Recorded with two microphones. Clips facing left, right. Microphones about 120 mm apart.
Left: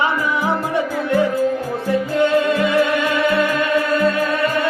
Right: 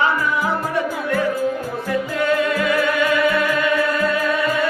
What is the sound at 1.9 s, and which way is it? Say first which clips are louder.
Music: left 4 dB; 30° left (ahead or behind).